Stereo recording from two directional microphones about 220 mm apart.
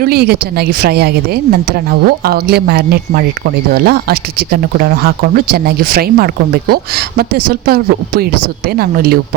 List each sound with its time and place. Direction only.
0.0 s a woman's voice: 45° right (ahead or behind)